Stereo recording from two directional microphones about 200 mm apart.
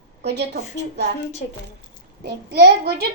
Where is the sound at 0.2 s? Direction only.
60° right (ahead or behind).